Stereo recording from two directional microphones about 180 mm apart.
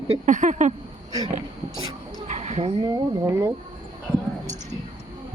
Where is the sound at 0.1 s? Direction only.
45° right (ahead or behind).